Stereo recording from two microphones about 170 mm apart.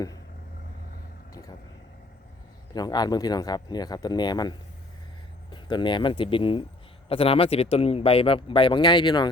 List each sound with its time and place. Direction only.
1.3 s vehicle: 20° left (ahead or behind)
2.7 s speech: 25° left (ahead or behind)